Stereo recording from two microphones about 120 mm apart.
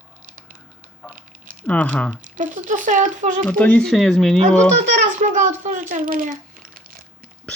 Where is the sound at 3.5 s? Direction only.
15° left (ahead or behind).